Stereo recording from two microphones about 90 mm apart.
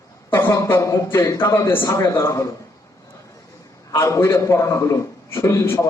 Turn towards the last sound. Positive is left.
turn(degrees=30)  # may be behind; listen again after turning